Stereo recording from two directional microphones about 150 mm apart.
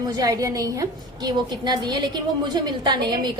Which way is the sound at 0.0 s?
25° right (ahead or behind).